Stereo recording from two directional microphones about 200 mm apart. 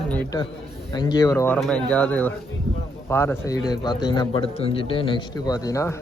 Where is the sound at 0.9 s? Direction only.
20° left (ahead or behind).